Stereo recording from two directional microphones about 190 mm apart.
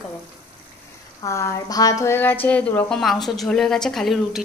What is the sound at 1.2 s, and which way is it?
A woman's voice, 15° left (ahead or behind).